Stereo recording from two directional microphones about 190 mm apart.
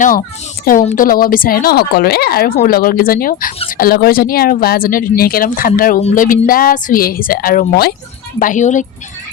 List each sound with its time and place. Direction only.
0.6 s a woman's voice: 45° left (ahead or behind)